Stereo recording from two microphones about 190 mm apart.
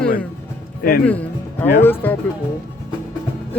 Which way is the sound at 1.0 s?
10° left (ahead or behind).